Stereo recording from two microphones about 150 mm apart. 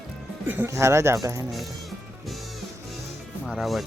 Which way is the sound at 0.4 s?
15° right (ahead or behind).